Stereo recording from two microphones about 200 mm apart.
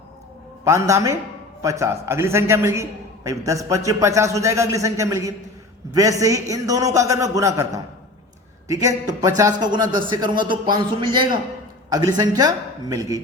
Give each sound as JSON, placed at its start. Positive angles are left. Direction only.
{"t": 0.6, "sound": "a man's voice", "side_deg": -15}